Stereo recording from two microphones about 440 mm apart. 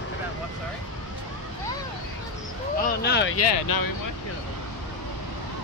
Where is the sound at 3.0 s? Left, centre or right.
Left.